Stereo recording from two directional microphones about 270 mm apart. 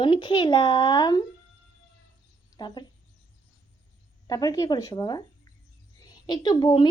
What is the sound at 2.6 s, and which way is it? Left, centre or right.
Speech, centre.